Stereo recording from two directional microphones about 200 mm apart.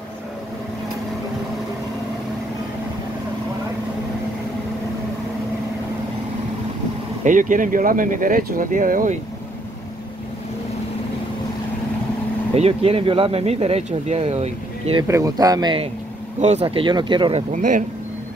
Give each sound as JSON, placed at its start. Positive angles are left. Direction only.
{"t": 7.2, "sound": "speech", "side_deg": -40}
{"t": 12.5, "sound": "speech", "side_deg": -30}
{"t": 15.0, "sound": "speech", "side_deg": -15}
{"t": 16.3, "sound": "speech", "side_deg": -35}
{"t": 17.5, "sound": "speech", "side_deg": -40}